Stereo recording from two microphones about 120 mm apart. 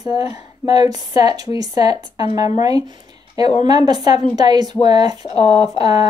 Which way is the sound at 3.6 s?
35° right (ahead or behind).